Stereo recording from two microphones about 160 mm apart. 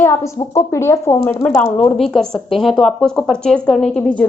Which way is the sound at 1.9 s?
Centre (ahead or behind).